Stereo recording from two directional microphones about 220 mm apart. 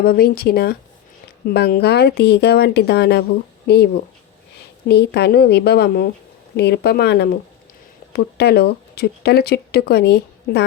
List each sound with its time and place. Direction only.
0.0 s speech: 45° left (ahead or behind)